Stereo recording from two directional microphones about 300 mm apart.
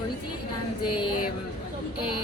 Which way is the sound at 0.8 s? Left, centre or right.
Left.